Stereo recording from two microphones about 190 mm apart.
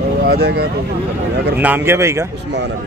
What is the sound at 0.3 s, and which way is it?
Speech, 60° right (ahead or behind).